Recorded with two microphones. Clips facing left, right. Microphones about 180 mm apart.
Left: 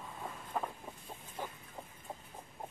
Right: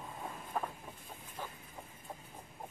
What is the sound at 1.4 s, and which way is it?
Vehicle, 15° left (ahead or behind).